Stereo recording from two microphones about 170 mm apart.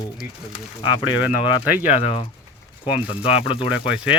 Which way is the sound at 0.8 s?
30° left (ahead or behind).